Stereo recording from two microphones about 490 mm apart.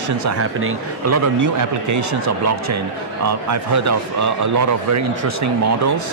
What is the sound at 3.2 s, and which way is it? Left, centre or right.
Speech, right.